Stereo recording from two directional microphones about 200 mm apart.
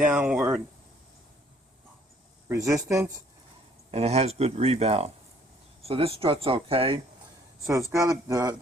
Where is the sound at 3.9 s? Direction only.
30° right (ahead or behind).